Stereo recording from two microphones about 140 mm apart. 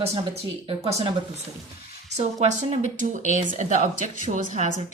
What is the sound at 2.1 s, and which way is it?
Speech, 55° right (ahead or behind).